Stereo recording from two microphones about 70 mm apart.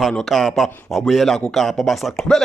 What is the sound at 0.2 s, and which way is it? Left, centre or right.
Speech, centre.